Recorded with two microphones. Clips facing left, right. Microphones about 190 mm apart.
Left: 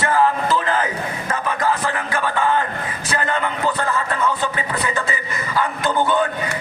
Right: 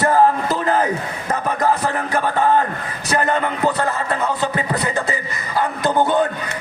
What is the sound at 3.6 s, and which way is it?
Speech, 40° right (ahead or behind).